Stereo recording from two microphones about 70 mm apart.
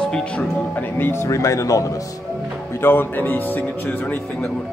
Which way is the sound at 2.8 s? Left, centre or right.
Left.